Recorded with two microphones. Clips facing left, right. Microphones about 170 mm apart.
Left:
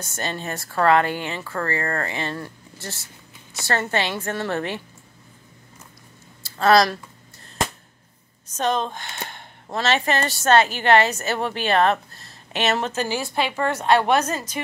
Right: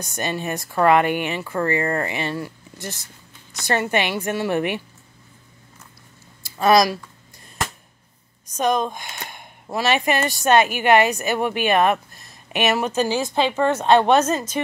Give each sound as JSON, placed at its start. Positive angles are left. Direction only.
{"t": 0.0, "sound": "speech", "side_deg": -15}
{"t": 6.4, "sound": "speech", "side_deg": -15}
{"t": 8.5, "sound": "speech", "side_deg": -15}